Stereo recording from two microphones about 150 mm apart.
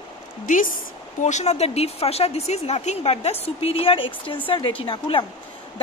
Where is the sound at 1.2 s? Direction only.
50° left (ahead or behind).